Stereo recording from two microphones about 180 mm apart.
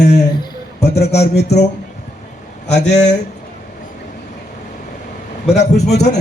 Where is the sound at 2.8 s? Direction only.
40° left (ahead or behind).